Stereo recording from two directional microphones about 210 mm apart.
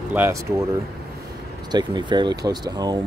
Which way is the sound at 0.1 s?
10° right (ahead or behind).